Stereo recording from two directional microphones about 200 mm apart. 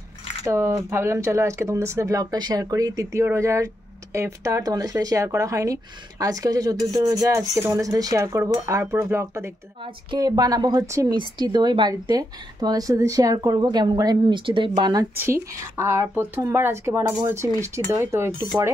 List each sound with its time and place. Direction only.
0.5 s a woman's voice: 15° right (ahead or behind)